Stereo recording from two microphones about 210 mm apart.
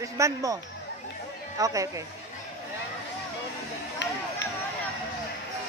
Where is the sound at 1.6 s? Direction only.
15° right (ahead or behind).